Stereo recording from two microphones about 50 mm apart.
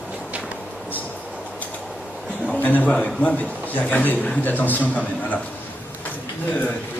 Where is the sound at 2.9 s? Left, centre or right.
Centre.